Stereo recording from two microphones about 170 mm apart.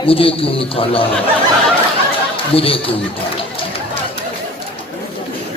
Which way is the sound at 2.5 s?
30° left (ahead or behind).